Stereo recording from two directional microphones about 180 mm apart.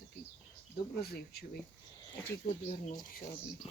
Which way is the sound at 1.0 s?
60° left (ahead or behind).